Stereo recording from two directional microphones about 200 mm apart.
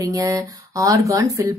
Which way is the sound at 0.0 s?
15° right (ahead or behind).